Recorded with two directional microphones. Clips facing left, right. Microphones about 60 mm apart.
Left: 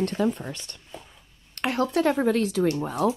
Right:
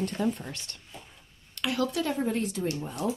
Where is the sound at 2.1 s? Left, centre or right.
Left.